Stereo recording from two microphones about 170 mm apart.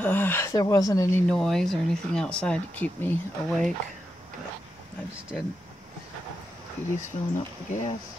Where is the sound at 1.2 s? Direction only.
5° left (ahead or behind).